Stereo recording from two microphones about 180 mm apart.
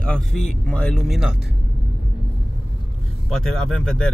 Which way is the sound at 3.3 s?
Centre (ahead or behind).